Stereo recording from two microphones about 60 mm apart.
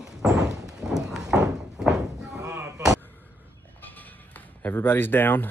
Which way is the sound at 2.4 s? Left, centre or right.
Right.